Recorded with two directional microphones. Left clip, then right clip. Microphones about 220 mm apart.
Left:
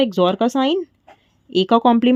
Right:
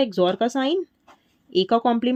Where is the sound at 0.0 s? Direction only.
35° left (ahead or behind).